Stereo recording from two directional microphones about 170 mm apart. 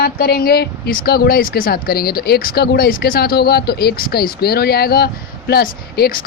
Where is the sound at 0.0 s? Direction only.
65° left (ahead or behind).